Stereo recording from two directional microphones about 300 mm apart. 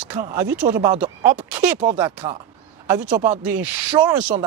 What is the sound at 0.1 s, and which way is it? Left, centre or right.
Speech, centre.